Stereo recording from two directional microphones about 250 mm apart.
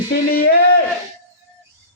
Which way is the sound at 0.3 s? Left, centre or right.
Left.